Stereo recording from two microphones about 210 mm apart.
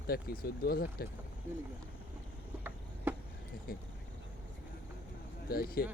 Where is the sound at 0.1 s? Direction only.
45° left (ahead or behind).